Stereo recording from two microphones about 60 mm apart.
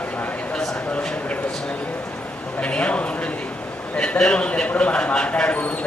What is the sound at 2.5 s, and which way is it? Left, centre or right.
Speech, centre.